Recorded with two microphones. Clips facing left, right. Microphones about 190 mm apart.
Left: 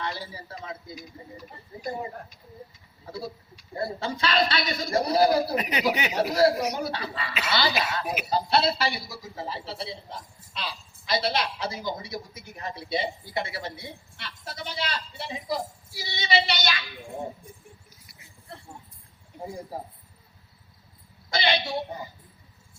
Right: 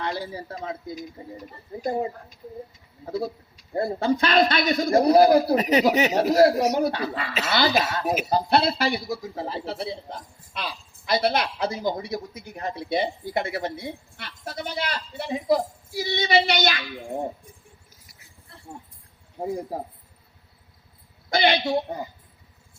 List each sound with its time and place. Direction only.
0.0 s a man's voice: 50° right (ahead or behind)
1.8 s speech: 50° right (ahead or behind)
3.8 s speech: 50° right (ahead or behind)
5.5 s speech: 40° right (ahead or behind)
21.2 s a woman's voice: 50° right (ahead or behind)